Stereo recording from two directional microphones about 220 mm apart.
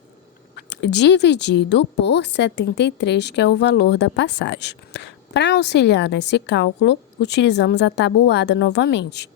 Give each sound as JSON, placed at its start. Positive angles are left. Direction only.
{"t": 0.5, "sound": "speech", "side_deg": 50}